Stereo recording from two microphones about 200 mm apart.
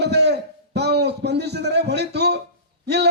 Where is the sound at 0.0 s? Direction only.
55° right (ahead or behind).